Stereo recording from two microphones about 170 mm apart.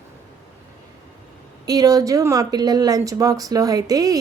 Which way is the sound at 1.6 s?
20° right (ahead or behind).